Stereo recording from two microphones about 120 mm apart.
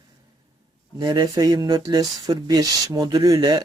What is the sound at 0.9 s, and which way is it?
Speech, 35° right (ahead or behind).